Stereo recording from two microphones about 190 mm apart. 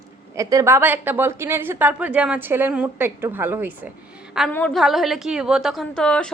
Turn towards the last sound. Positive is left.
turn(degrees=5)  # may be behind; listen again after turning